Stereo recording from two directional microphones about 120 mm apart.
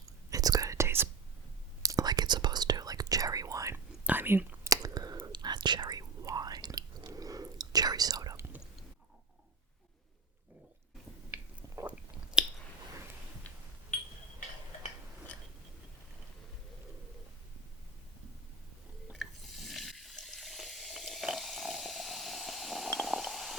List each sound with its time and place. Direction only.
0.0 s whispering: 30° right (ahead or behind)
4.0 s whispering: 15° right (ahead or behind)
11.9 s chewing: 5° right (ahead or behind)
13.5 s a sound: 10° left (ahead or behind)
19.2 s water: centre (ahead or behind)
22.9 s stomach rumble: centre (ahead or behind)